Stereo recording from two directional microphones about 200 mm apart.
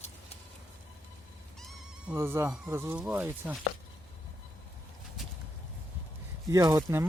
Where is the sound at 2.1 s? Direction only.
15° right (ahead or behind).